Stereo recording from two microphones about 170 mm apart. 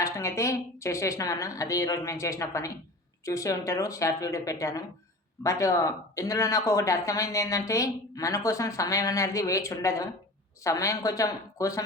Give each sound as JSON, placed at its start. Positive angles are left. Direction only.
{"t": 0.0, "sound": "a woman's voice", "side_deg": 15}